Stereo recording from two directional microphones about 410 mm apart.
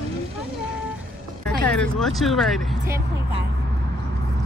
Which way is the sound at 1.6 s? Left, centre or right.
Centre.